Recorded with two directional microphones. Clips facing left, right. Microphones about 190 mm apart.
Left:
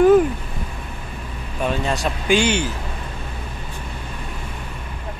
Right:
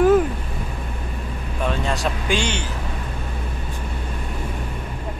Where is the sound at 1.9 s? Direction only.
5° left (ahead or behind).